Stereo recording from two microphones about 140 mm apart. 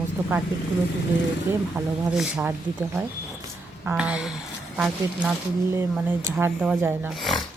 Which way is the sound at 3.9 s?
10° right (ahead or behind).